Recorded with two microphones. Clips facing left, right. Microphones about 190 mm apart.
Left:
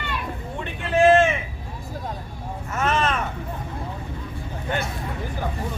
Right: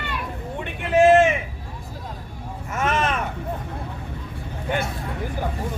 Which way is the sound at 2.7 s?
15° right (ahead or behind).